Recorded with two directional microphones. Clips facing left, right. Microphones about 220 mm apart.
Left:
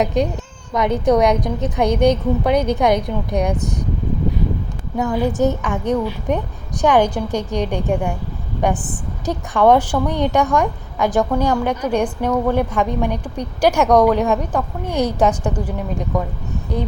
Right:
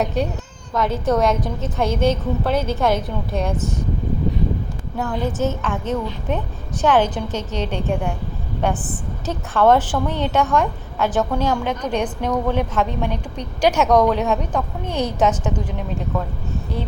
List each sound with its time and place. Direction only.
0.7 s a woman's voice: 15° left (ahead or behind)
5.0 s a woman's voice: 15° left (ahead or behind)